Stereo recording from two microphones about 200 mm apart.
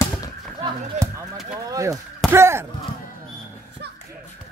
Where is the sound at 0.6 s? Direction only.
15° right (ahead or behind).